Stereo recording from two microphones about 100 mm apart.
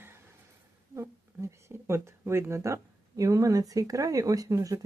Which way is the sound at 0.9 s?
30° right (ahead or behind).